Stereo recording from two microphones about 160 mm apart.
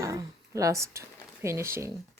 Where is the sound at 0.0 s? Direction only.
20° right (ahead or behind).